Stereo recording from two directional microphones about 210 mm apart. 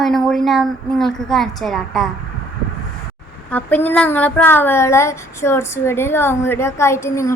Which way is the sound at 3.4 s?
5° left (ahead or behind).